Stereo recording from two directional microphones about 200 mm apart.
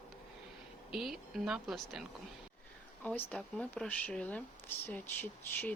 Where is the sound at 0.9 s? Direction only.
Centre (ahead or behind).